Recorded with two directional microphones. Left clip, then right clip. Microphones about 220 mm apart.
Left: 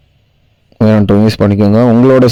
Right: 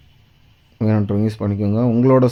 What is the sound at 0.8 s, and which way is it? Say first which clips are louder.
Speech: left 11 dB; 40° left (ahead or behind).